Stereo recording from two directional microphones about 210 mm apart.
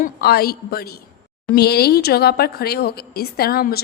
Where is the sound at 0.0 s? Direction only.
45° left (ahead or behind).